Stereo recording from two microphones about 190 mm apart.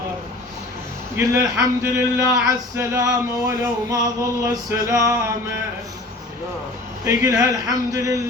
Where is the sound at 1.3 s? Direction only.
15° right (ahead or behind).